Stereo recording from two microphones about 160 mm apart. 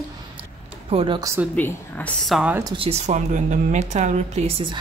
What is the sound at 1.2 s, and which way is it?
Speech, 15° right (ahead or behind).